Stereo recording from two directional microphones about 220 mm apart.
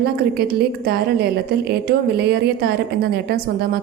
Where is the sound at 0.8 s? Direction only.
45° right (ahead or behind).